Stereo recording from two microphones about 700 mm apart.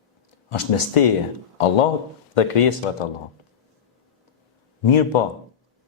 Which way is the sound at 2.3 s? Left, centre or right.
Left.